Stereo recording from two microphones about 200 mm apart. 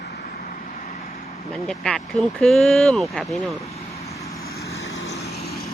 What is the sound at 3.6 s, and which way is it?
Vehicle, 30° left (ahead or behind).